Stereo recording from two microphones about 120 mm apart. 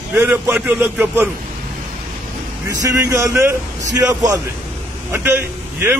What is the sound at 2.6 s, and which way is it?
Speech, 20° right (ahead or behind).